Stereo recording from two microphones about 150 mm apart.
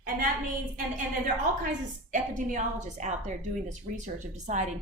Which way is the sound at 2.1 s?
60° right (ahead or behind).